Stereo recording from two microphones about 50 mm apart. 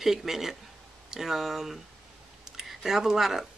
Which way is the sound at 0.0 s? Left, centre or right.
Centre.